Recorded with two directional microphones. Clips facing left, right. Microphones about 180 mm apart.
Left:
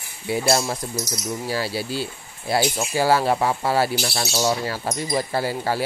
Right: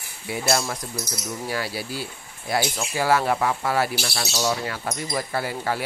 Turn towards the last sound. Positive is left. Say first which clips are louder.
# left 3 dB
turn(degrees=30)  # may be behind; listen again after turning